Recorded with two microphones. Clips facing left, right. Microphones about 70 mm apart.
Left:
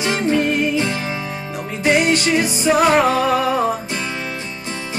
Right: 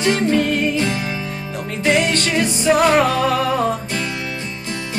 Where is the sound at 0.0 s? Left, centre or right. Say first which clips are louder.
Right 1 dB; centre.